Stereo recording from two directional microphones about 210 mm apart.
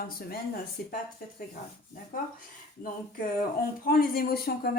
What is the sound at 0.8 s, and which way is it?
Speech, 45° left (ahead or behind).